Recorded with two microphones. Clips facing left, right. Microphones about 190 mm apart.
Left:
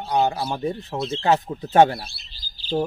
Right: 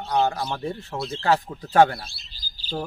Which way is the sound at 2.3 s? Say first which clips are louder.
Right 1 dB; 40° right (ahead or behind).